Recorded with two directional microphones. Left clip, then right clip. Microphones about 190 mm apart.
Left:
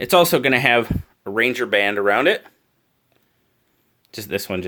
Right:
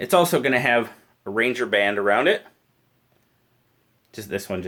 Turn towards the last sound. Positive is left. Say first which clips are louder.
# left 3 dB
turn(degrees=40)  # may be behind; listen again after turning